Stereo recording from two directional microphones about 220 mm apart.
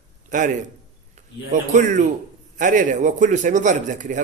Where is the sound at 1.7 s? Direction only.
35° right (ahead or behind).